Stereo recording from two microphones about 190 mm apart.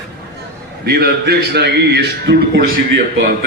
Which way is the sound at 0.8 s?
55° right (ahead or behind).